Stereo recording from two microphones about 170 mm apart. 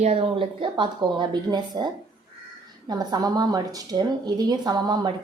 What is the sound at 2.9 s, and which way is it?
Speech, 25° right (ahead or behind).